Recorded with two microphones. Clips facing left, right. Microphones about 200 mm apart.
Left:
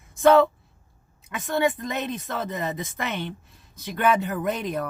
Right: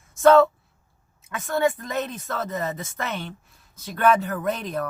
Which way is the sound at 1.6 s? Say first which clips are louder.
Right 1 dB; 20° left (ahead or behind).